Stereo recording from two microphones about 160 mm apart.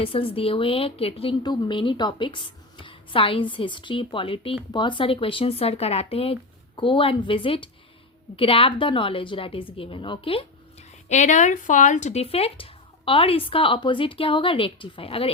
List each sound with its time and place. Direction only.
0.0 s a woman's voice: 35° left (ahead or behind)